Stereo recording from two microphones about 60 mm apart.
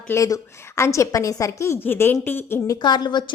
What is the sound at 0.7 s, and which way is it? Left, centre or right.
A woman's voice, left.